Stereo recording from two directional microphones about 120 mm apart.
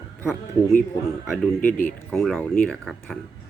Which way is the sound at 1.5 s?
10° left (ahead or behind).